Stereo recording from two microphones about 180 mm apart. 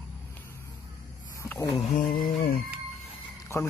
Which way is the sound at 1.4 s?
15° left (ahead or behind).